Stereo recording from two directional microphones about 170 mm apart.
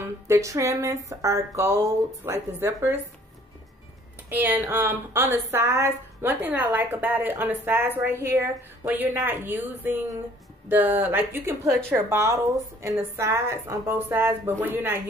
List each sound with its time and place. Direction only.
0.3 s a woman's voice: 20° right (ahead or behind)
4.3 s a woman's voice: 10° right (ahead or behind)